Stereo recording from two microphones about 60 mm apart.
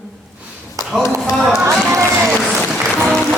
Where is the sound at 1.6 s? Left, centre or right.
Right.